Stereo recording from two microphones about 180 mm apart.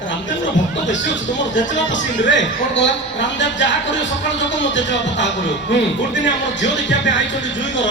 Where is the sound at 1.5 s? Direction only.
90° left.